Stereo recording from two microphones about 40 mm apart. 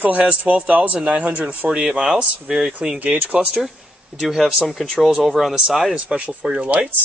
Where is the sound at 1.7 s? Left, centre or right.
Right.